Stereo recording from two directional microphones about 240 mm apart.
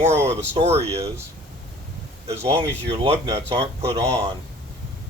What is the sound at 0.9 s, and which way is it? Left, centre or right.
Speech, centre.